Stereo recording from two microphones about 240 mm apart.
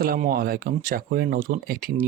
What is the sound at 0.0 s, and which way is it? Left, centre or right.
Speech, right.